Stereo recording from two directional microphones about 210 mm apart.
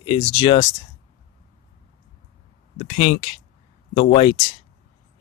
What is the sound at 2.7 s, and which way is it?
Speech, 35° left (ahead or behind).